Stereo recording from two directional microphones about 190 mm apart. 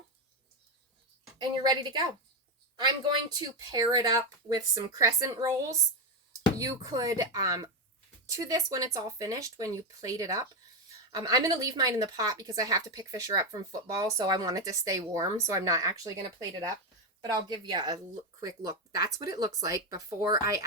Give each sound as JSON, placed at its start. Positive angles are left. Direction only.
{"t": 1.4, "sound": "speech", "side_deg": -20}
{"t": 17.2, "sound": "speech", "side_deg": -20}